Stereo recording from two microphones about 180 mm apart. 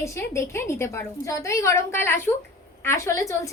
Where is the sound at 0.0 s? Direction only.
15° left (ahead or behind).